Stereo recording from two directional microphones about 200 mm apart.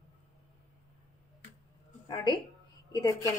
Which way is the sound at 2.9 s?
20° left (ahead or behind).